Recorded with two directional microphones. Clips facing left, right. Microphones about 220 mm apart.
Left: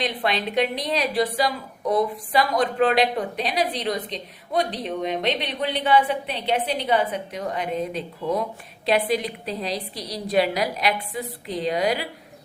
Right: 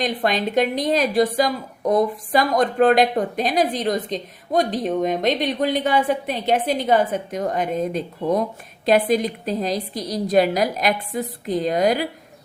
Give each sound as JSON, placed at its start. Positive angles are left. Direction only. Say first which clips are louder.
{"t": 0.0, "sound": "a woman's voice", "louder": "right 4 dB", "side_deg": -45}